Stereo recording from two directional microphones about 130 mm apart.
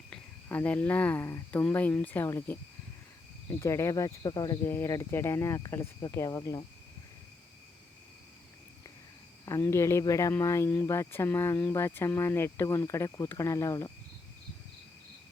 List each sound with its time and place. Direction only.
0.4 s speech: 15° left (ahead or behind)
3.6 s speech: 20° left (ahead or behind)
4.6 s speech: 20° left (ahead or behind)
9.5 s speech: 20° left (ahead or behind)